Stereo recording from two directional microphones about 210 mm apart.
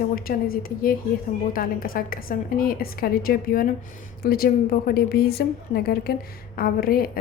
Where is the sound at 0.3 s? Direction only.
45° left (ahead or behind).